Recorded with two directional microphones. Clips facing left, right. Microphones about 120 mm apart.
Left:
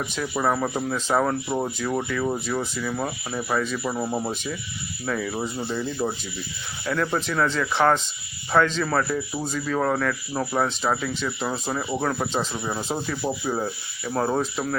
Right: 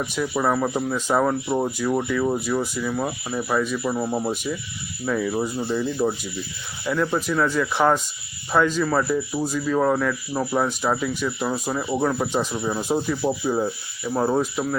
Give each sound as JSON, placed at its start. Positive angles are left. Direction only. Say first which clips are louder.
{"t": 0.2, "sound": "speech", "louder": "right 2 dB", "side_deg": 0}
{"t": 12.5, "sound": "speech", "louder": "right 4 dB", "side_deg": 0}